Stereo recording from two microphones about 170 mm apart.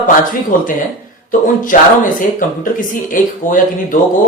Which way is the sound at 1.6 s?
50° left (ahead or behind).